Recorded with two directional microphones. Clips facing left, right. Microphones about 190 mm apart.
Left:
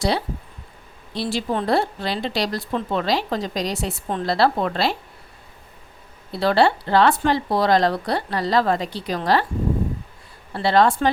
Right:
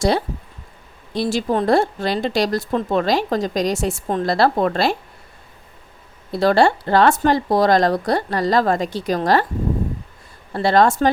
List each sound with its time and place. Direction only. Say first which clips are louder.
1.1 s speech: right 4 dB; 45° right (ahead or behind)
6.3 s speech: right 3 dB; 45° right (ahead or behind)
10.5 s speech: right 2 dB; 45° right (ahead or behind)